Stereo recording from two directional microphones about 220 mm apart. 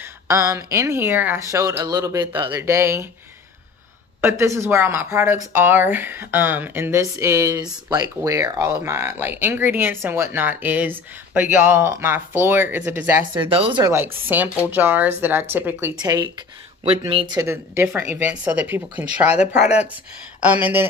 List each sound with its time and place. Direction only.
0.0 s speech: 15° right (ahead or behind)
4.2 s speech: 10° right (ahead or behind)
13.3 s speech: 25° right (ahead or behind)
17.4 s speech: 10° right (ahead or behind)